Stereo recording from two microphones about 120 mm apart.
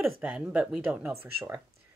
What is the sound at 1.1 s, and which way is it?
Speech, 20° right (ahead or behind).